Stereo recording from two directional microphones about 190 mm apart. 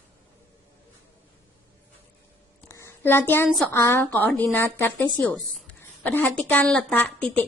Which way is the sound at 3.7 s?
15° left (ahead or behind).